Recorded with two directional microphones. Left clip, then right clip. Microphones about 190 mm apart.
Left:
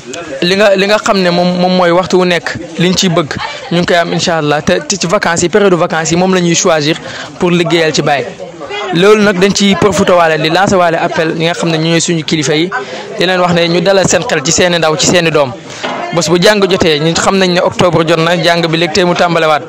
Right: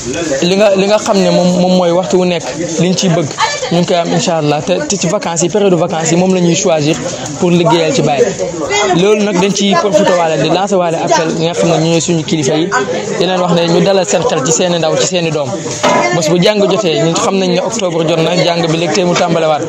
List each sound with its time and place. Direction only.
0.4 s speech: 45° left (ahead or behind)